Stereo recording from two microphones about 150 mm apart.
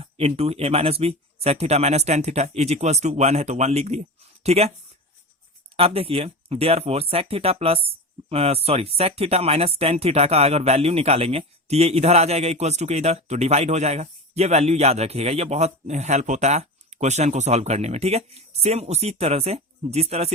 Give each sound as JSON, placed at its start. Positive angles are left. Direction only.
{"t": 0.0, "sound": "speech", "side_deg": -40}
{"t": 5.7, "sound": "speech", "side_deg": -40}